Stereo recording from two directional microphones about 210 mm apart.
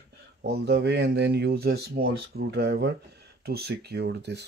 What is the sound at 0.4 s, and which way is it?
Speech, 50° right (ahead or behind).